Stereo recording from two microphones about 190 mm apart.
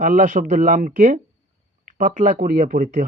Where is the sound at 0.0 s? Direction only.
45° right (ahead or behind).